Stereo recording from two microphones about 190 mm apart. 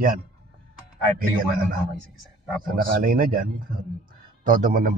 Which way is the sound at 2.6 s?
50° right (ahead or behind).